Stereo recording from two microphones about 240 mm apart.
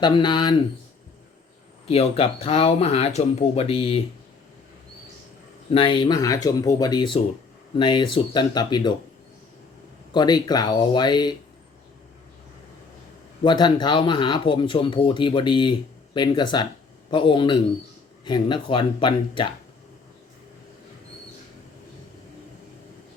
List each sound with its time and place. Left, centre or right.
0.0 s speech: centre
1.9 s speech: left
5.7 s speech: left
10.1 s speech: centre
13.4 s speech: centre